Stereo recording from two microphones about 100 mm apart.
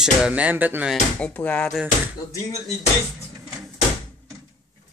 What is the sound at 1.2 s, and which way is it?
Speech, 15° left (ahead or behind).